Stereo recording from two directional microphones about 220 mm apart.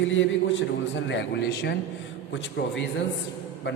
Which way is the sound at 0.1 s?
60° left (ahead or behind).